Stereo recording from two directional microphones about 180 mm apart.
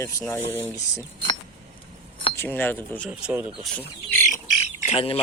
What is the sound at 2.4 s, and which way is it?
Speech, 10° left (ahead or behind).